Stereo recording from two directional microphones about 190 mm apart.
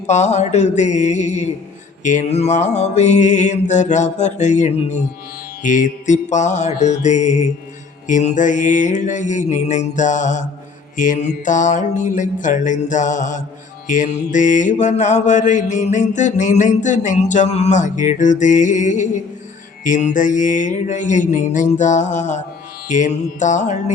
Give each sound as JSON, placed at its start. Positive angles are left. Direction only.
{"t": 0.1, "sound": "mantra", "side_deg": 35}